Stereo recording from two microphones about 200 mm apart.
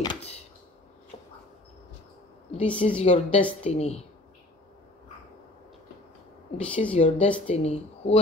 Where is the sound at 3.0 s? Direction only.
35° left (ahead or behind).